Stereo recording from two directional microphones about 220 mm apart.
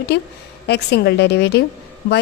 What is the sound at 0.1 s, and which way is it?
A woman's voice, 50° left (ahead or behind).